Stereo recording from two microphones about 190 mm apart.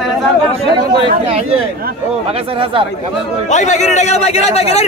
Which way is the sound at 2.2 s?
30° right (ahead or behind).